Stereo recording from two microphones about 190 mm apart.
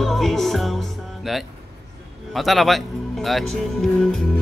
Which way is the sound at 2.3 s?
Centre (ahead or behind).